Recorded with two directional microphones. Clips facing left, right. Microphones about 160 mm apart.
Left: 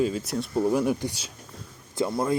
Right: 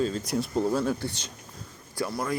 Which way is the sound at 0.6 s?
15° left (ahead or behind).